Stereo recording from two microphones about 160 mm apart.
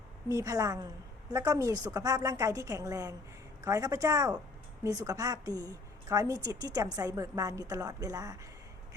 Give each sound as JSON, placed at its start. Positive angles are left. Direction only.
{"t": 0.3, "sound": "a woman's voice", "side_deg": -20}